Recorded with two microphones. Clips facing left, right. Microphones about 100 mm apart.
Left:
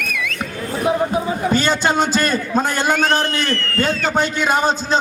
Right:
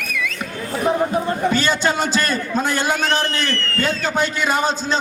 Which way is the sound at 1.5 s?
45° left (ahead or behind).